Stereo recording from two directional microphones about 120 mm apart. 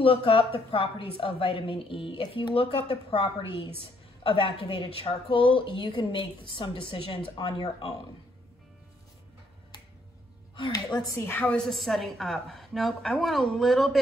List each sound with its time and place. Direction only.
0.0 s a woman's voice: 50° left (ahead or behind)
10.9 s a woman's voice: 35° left (ahead or behind)
11.2 s a woman's voice: 10° left (ahead or behind)